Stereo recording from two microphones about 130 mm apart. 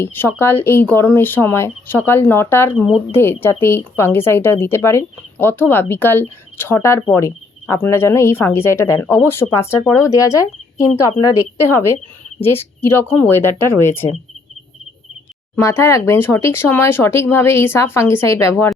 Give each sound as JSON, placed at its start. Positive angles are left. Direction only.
{"t": 0.0, "sound": "speech", "side_deg": 15}
{"t": 12.4, "sound": "speech", "side_deg": 15}
{"t": 15.5, "sound": "speech", "side_deg": 20}